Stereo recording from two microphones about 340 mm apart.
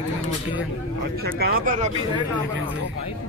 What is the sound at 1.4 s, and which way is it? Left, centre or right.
Speech, right.